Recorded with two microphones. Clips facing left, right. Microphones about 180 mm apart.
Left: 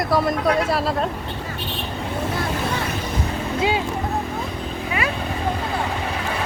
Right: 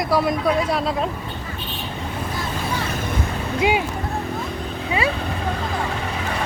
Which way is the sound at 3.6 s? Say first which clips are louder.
Right 2 dB; 15° right (ahead or behind).